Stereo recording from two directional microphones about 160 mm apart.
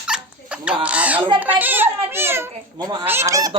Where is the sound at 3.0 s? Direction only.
15° right (ahead or behind).